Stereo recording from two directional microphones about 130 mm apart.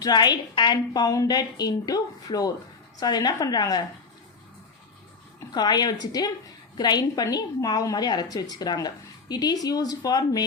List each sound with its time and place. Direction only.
0.0 s a woman's voice: 30° left (ahead or behind)
5.5 s a woman's voice: 30° left (ahead or behind)